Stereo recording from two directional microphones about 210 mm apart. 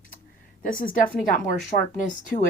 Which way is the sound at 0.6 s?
40° left (ahead or behind).